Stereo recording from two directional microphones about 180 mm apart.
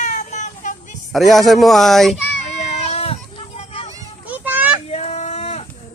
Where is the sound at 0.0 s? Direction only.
40° left (ahead or behind).